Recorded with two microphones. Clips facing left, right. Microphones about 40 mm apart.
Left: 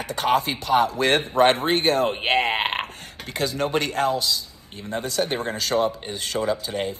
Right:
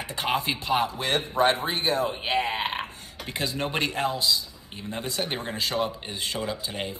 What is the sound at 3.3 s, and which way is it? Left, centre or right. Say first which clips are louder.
Speech: left 5 dB; centre.